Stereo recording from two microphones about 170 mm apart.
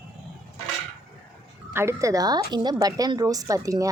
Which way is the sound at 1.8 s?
15° right (ahead or behind).